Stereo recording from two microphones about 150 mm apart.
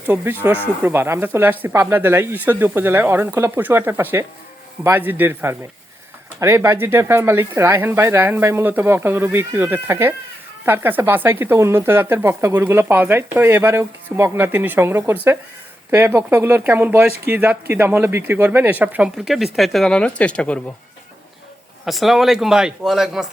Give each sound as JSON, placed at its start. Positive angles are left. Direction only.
{"t": 0.0, "sound": "speech", "side_deg": -15}
{"t": 21.8, "sound": "a man's voice", "side_deg": 0}